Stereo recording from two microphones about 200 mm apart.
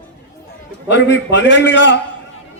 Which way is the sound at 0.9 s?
65° left (ahead or behind).